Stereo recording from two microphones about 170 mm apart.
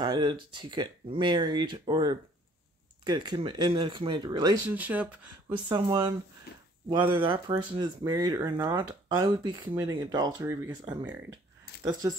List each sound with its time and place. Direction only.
0.0 s speech: 30° right (ahead or behind)
4.6 s speech: 10° right (ahead or behind)
5.5 s speech: 30° right (ahead or behind)
6.5 s a sound: 70° left (ahead or behind)
6.9 s speech: 30° right (ahead or behind)
11.8 s speech: 25° right (ahead or behind)